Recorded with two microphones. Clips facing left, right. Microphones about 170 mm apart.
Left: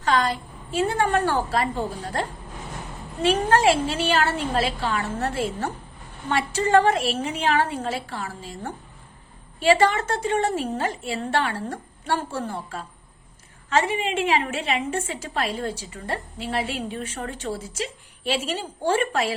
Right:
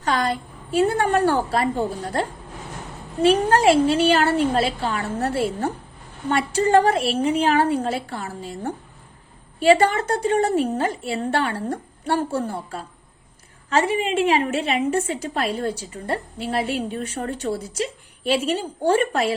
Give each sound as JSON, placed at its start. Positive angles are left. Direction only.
{"t": 0.0, "sound": "a woman's voice", "side_deg": -40}